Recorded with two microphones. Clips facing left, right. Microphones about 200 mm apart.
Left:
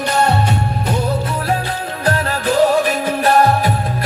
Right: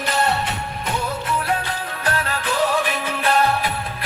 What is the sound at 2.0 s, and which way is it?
Music, 40° left (ahead or behind).